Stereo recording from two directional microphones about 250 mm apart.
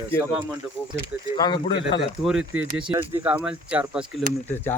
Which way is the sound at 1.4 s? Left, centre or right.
Centre.